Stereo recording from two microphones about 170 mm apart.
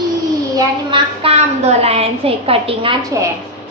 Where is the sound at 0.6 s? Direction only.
30° right (ahead or behind).